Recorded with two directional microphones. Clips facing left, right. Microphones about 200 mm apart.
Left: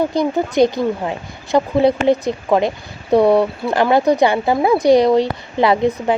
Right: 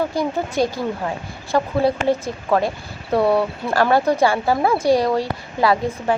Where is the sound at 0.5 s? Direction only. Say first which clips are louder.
Left 6 dB; 20° left (ahead or behind).